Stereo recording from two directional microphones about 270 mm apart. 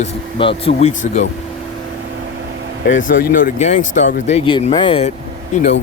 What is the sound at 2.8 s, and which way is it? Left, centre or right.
Speech, left.